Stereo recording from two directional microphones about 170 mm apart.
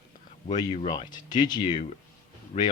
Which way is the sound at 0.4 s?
25° left (ahead or behind).